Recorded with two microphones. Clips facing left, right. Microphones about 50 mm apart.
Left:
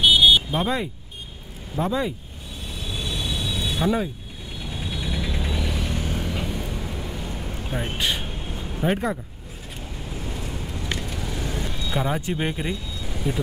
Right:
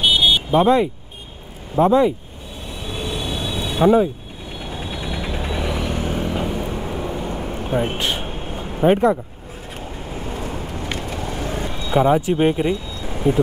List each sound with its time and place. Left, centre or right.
0.6 s speech: right
2.9 s train: right
3.3 s mechanisms: right
4.6 s vehicle: right
7.7 s a sound: right
10.1 s vehicle: right
12.4 s speech: right